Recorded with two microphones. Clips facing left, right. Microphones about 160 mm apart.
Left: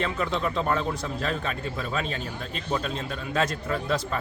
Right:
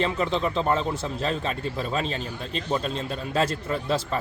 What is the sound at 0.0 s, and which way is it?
Speech, 25° right (ahead or behind).